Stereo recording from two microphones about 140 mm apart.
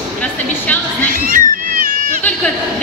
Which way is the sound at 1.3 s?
85° right.